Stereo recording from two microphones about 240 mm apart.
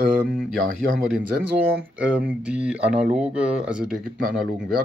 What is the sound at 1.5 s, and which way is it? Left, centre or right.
Speech, centre.